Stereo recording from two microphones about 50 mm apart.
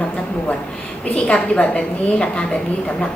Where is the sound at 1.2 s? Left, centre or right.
Left.